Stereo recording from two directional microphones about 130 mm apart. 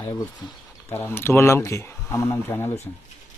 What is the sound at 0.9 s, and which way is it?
Speech, 20° left (ahead or behind).